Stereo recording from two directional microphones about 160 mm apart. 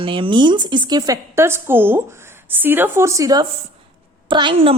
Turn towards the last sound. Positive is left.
turn(degrees=-30)  # may be behind; listen again after turning